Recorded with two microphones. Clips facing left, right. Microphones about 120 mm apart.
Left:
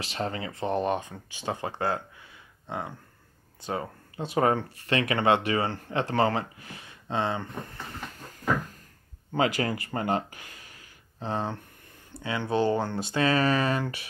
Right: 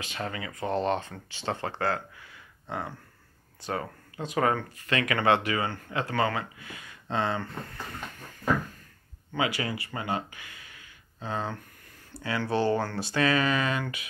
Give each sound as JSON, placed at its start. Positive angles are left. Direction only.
{"t": 0.0, "sound": "speech", "side_deg": 35}
{"t": 7.1, "sound": "speech", "side_deg": 20}
{"t": 9.3, "sound": "speech", "side_deg": 40}
{"t": 11.1, "sound": "speech", "side_deg": 25}